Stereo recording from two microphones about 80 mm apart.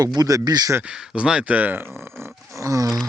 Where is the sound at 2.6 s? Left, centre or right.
Right.